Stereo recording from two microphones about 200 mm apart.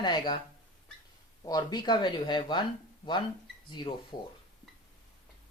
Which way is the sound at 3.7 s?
20° left (ahead or behind).